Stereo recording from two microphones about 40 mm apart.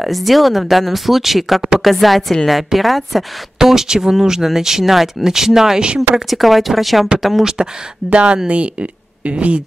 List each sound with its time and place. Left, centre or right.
0.0 s speech: centre
3.5 s speech: centre
8.1 s speech: right